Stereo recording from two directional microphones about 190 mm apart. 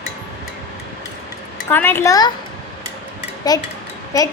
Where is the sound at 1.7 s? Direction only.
10° left (ahead or behind).